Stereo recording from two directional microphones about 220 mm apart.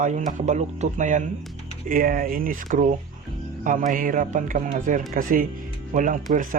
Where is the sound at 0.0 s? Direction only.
35° right (ahead or behind).